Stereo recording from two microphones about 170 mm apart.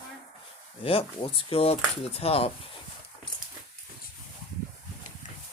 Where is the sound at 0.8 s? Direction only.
35° left (ahead or behind).